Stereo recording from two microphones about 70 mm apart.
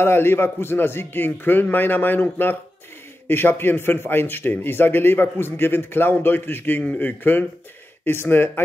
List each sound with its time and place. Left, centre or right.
0.0 s a man's voice: left